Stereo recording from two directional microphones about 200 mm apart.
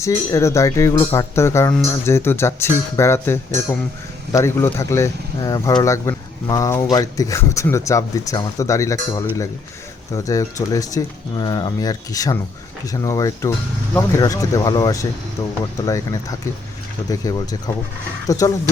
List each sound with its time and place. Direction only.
0.0 s speech: 15° left (ahead or behind)
10.2 s speech: 15° left (ahead or behind)
17.1 s speech: 20° left (ahead or behind)